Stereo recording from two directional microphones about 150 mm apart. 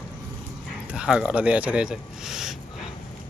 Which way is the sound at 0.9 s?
5° right (ahead or behind).